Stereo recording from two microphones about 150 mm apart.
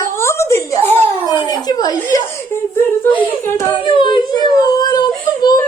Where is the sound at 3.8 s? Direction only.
35° left (ahead or behind).